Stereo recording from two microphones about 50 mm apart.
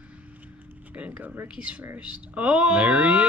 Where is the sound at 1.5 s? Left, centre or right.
Right.